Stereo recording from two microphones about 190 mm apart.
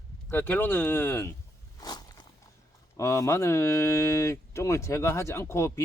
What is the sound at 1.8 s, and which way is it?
Walk, 20° left (ahead or behind).